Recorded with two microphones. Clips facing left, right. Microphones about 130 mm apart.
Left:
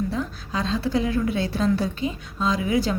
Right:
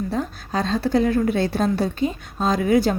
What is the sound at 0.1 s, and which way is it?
A woman's voice, 50° right (ahead or behind).